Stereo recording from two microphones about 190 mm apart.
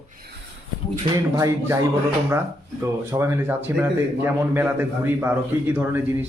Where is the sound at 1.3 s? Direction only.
15° right (ahead or behind).